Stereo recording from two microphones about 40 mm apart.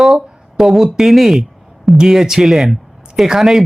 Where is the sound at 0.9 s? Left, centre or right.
Centre.